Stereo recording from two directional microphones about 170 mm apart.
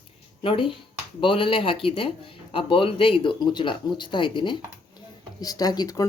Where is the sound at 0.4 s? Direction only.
30° left (ahead or behind).